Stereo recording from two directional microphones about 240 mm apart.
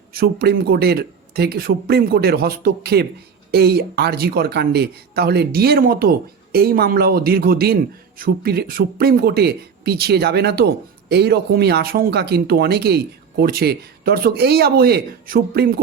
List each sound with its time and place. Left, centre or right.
0.1 s speech: right